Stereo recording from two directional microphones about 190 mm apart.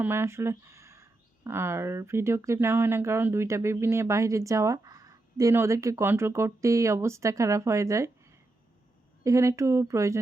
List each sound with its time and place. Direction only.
0.0 s speech: 15° right (ahead or behind)
9.2 s speech: 15° right (ahead or behind)